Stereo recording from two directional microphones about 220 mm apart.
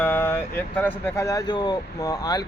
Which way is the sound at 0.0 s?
10° left (ahead or behind).